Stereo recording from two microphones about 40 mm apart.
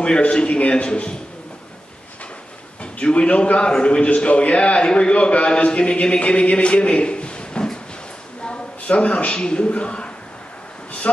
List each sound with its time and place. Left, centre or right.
0.3 s a man's voice: left
2.8 s a man's voice: left